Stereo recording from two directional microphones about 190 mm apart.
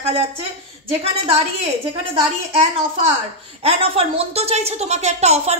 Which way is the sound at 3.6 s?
30° right (ahead or behind).